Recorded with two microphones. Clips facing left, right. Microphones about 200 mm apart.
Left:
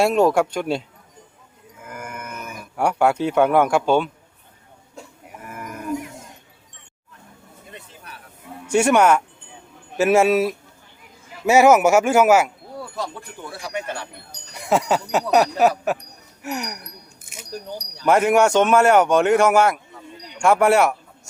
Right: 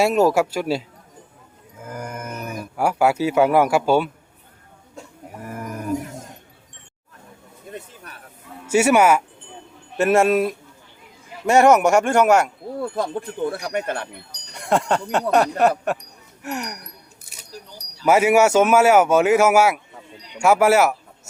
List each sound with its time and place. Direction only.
0.0 s speech: centre (ahead or behind)
1.8 s a sound: 40° right (ahead or behind)
2.7 s speech: 5° right (ahead or behind)
5.0 s cough: centre (ahead or behind)
5.5 s a sound: 35° right (ahead or behind)
7.7 s a sound: 45° right (ahead or behind)
8.6 s speech: 5° right (ahead or behind)
12.8 s speech: 50° right (ahead or behind)
14.5 s speech: 5° left (ahead or behind)
17.5 s speech: 55° left (ahead or behind)
18.0 s speech: 5° right (ahead or behind)